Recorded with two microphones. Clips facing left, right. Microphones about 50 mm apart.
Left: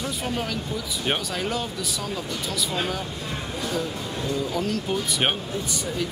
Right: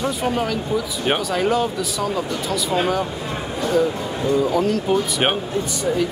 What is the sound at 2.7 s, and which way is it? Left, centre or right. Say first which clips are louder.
Speech: right 8 dB; centre.